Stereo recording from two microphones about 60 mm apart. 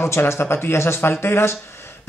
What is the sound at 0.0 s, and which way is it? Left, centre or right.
A man's voice, left.